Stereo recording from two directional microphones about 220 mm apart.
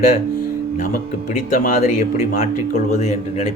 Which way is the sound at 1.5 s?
35° left (ahead or behind).